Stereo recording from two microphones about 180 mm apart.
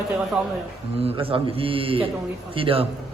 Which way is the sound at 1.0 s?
30° right (ahead or behind).